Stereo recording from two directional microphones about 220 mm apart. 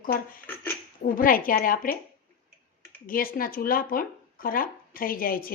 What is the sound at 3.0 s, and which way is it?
Speech, 40° left (ahead or behind).